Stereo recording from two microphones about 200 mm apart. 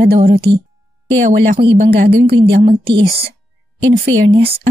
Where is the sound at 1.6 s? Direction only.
55° right (ahead or behind).